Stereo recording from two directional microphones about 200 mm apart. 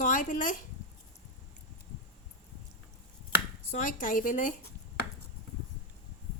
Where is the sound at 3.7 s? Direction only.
40° left (ahead or behind).